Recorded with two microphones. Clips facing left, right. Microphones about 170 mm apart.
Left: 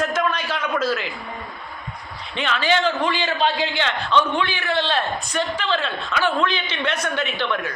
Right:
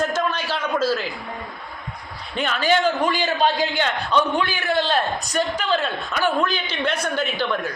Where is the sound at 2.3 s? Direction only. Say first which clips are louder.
Right 1 dB; 45° right (ahead or behind).